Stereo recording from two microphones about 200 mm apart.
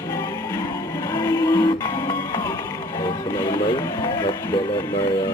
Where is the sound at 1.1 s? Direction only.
20° left (ahead or behind).